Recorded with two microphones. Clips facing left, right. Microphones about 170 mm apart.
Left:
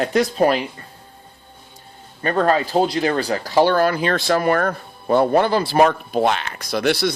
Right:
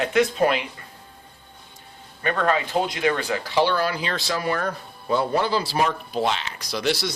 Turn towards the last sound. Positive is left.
turn(degrees=60)  # may be behind; listen again after turning